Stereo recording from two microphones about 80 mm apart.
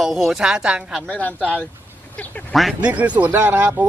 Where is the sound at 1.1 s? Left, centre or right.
Centre.